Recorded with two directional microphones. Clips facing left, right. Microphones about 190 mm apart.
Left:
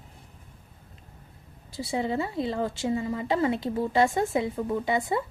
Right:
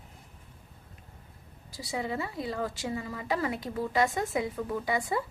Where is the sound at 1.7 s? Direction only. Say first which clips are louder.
Left 5 dB; 25° left (ahead or behind).